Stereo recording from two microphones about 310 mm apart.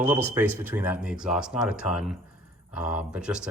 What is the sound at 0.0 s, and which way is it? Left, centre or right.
Speech, centre.